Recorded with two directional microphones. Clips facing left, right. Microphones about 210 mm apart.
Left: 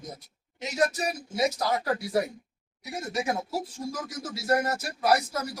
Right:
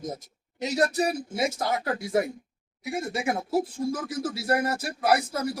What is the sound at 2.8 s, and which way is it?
Speech, 25° right (ahead or behind).